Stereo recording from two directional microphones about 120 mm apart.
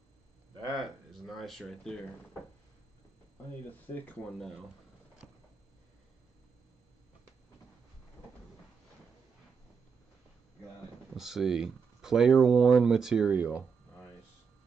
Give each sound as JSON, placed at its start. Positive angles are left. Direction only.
{"t": 0.7, "sound": "speech", "side_deg": 0}
{"t": 3.6, "sound": "speech", "side_deg": 15}
{"t": 4.3, "sound": "speech", "side_deg": 5}
{"t": 5.2, "sound": "a sound", "side_deg": -5}
{"t": 11.1, "sound": "speech", "side_deg": -5}